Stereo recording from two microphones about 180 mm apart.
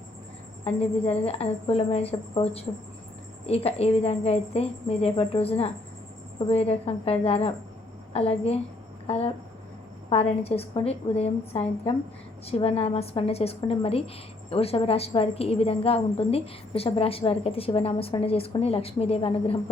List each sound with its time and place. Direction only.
0.6 s a woman's voice: 35° left (ahead or behind)